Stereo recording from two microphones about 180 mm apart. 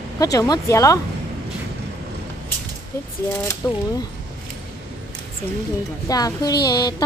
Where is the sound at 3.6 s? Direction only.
15° left (ahead or behind).